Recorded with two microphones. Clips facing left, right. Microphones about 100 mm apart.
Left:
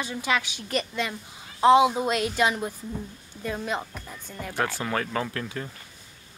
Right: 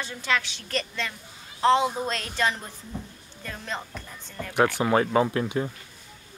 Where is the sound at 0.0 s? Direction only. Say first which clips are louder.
Left 1 dB; 15° left (ahead or behind).